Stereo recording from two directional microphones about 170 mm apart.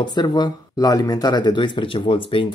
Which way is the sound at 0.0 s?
25° left (ahead or behind).